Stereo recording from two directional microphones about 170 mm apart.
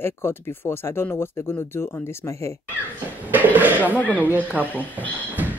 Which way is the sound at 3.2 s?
10° right (ahead or behind).